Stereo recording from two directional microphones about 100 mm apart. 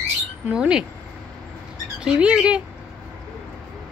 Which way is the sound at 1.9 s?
10° right (ahead or behind).